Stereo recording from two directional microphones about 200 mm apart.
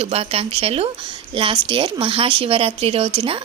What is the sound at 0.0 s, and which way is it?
A woman's voice, 30° right (ahead or behind).